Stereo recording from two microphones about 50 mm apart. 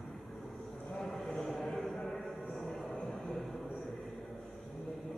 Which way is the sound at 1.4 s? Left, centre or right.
Centre.